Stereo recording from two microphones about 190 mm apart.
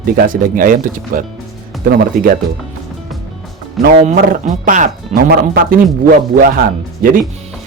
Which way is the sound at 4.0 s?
40° right (ahead or behind).